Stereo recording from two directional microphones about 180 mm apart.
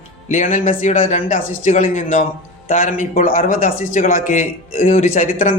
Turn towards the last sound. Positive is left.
turn(degrees=45)  # may be behind; listen again after turning